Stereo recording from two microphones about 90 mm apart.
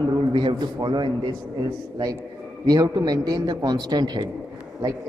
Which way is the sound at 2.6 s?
40° right (ahead or behind).